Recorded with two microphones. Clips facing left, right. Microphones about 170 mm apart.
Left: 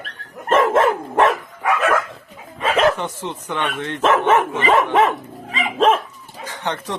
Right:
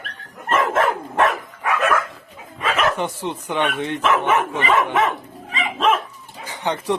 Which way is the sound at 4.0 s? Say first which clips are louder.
Left 4 dB; 30° left (ahead or behind).